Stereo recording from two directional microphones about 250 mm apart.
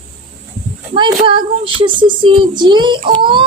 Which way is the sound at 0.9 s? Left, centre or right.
Centre.